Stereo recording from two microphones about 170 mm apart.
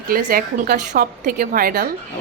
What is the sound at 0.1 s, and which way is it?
A woman's voice, 60° right (ahead or behind).